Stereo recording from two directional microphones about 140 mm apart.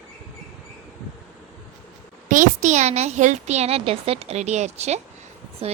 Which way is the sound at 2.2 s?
70° right (ahead or behind).